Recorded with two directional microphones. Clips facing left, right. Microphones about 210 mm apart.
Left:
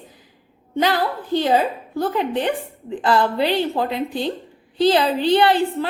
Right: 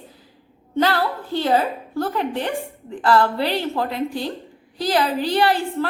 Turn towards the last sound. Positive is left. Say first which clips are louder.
# left 3 dB
turn(degrees=20)  # may be behind; listen again after turning